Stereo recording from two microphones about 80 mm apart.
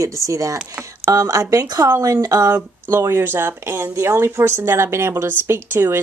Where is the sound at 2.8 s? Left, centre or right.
Right.